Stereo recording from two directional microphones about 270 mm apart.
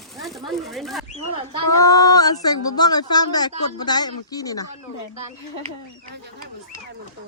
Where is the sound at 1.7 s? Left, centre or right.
Centre.